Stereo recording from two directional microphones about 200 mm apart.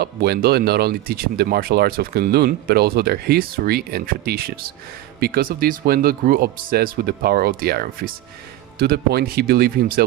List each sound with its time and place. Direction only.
0.0 s speech: 50° right (ahead or behind)